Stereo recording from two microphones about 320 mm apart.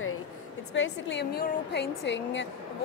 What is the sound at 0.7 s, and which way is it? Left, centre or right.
A woman's voice, left.